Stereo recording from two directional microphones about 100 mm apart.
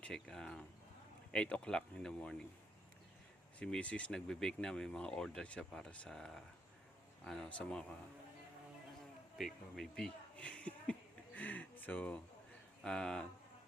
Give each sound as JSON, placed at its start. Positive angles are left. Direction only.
{"t": 0.0, "sound": "speech", "side_deg": 5}
{"t": 3.6, "sound": "speech", "side_deg": 10}
{"t": 9.4, "sound": "speech", "side_deg": 5}